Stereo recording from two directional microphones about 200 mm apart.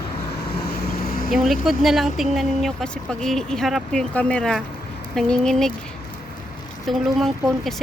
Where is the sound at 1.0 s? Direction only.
45° left (ahead or behind).